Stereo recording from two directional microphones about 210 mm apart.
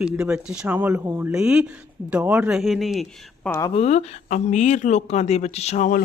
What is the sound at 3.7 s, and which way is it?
Speech, 30° left (ahead or behind).